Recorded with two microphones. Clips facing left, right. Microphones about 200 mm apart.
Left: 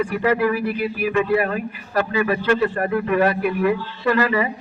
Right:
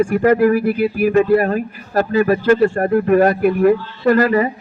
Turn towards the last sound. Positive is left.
turn(degrees=-45)  # may be behind; listen again after turning